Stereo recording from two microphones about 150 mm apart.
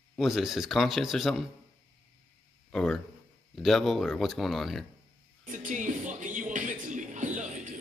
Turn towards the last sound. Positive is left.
turn(degrees=-55)  # may be behind; listen again after turning